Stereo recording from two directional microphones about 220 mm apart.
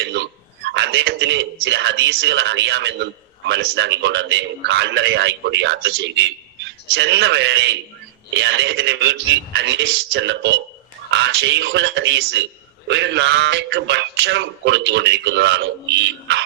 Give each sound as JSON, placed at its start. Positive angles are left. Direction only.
{"t": 0.0, "sound": "a man's voice", "side_deg": -50}